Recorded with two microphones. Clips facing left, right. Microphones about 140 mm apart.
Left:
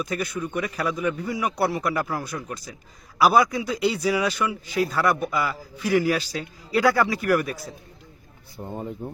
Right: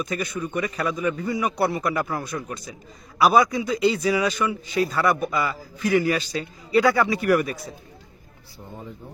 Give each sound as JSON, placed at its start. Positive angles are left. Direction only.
{"t": 0.0, "sound": "a man's voice", "side_deg": 5}
{"t": 8.5, "sound": "speech", "side_deg": 50}